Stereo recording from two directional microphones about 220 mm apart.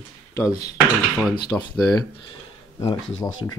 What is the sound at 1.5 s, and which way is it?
Speech, 5° left (ahead or behind).